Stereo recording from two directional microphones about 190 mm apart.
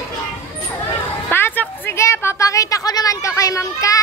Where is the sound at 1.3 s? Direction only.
10° left (ahead or behind).